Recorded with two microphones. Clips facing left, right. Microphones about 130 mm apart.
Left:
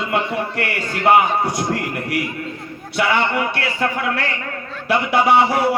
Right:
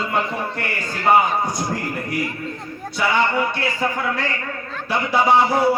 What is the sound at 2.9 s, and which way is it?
A man's voice, 70° left (ahead or behind).